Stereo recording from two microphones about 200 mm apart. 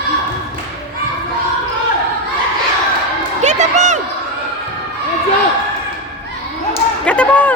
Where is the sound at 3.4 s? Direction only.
35° right (ahead or behind).